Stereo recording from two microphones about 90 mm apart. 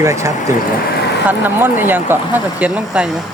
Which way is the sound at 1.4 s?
25° right (ahead or behind).